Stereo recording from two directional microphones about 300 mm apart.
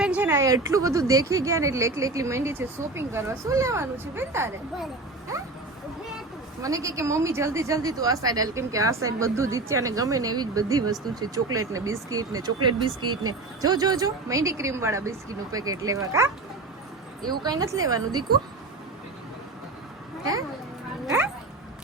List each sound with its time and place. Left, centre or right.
0.0 s speech: centre
6.6 s speech: centre
11.4 s speech: right
11.7 s speech: centre
12.8 s speech: right
13.6 s speech: centre